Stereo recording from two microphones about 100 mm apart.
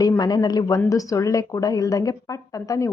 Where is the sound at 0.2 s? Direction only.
40° left (ahead or behind).